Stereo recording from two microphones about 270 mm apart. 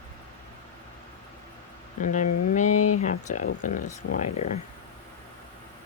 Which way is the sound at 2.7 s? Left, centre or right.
Left.